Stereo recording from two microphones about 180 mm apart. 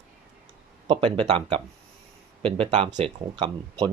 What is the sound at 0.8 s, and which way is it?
Speech, 30° right (ahead or behind).